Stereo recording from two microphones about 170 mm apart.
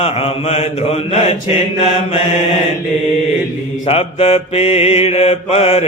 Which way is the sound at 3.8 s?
35° left (ahead or behind).